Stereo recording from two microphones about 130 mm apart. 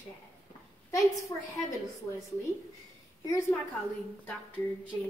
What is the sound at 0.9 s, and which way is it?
Speech, 25° left (ahead or behind).